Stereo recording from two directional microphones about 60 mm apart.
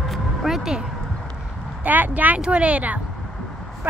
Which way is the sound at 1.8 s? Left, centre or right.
Right.